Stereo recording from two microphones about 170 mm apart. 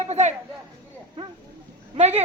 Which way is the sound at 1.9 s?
40° right (ahead or behind).